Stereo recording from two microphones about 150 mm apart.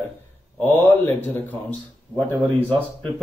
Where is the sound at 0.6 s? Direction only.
15° left (ahead or behind).